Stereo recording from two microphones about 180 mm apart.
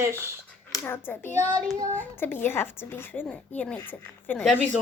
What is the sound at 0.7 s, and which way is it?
A woman's voice, 15° left (ahead or behind).